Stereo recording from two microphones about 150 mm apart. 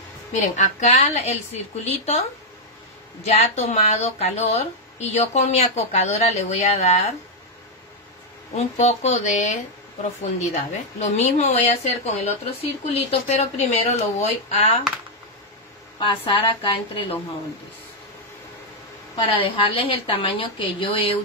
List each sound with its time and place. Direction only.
0.3 s a woman's voice: 50° left (ahead or behind)
3.3 s a woman's voice: 45° left (ahead or behind)
8.7 s a woman's voice: 45° left (ahead or behind)
16.0 s a woman's voice: 35° left (ahead or behind)
19.1 s a woman's voice: 35° left (ahead or behind)